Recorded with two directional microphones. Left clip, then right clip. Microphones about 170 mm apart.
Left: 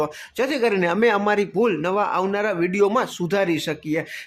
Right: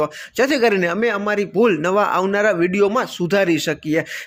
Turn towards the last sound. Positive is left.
turn(degrees=-15)  # may be behind; listen again after turning